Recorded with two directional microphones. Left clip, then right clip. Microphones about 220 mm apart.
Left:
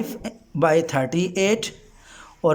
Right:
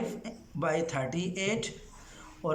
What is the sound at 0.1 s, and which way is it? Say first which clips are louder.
A man's voice: left 8 dB; 55° left (ahead or behind).